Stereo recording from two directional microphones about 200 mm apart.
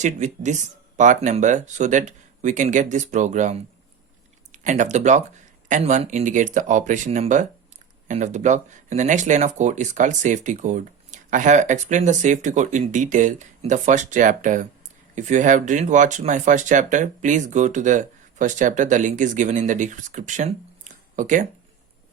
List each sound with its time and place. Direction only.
0.0 s speech: 35° right (ahead or behind)